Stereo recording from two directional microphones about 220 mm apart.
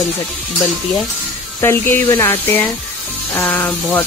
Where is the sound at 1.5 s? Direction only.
10° left (ahead or behind).